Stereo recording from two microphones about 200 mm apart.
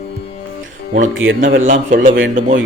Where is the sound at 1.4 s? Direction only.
40° right (ahead or behind).